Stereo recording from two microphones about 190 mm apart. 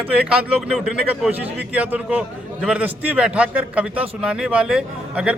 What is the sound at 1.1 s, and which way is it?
A man's voice, 10° right (ahead or behind).